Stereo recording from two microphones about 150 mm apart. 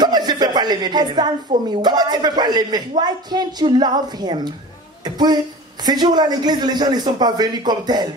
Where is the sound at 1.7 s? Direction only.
30° right (ahead or behind).